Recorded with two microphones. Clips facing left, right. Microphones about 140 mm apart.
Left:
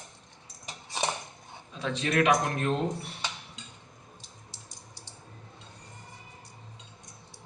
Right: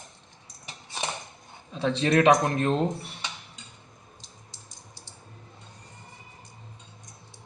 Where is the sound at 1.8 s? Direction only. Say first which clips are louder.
Right 5 dB; 30° right (ahead or behind).